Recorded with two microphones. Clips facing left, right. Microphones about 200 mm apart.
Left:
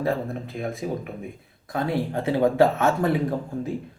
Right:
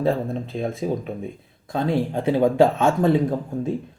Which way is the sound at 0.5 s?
25° right (ahead or behind).